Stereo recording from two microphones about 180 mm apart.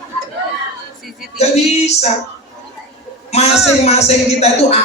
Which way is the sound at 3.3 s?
35° left (ahead or behind).